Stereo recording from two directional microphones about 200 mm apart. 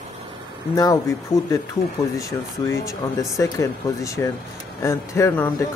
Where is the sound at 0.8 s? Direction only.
15° left (ahead or behind).